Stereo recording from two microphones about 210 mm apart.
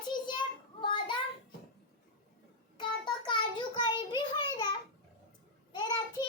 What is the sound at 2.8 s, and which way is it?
Child singing, 20° left (ahead or behind).